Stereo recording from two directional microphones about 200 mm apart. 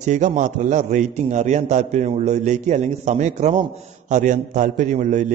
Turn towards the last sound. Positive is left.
turn(degrees=-35)  # may be behind; listen again after turning